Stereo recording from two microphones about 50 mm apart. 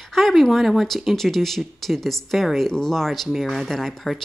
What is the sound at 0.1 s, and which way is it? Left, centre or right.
Speech, centre.